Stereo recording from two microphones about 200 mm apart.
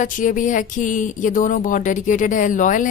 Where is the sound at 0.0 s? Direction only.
40° left (ahead or behind).